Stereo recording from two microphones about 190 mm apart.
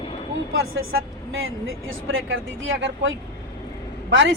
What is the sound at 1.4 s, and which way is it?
A woman's voice, 90° right.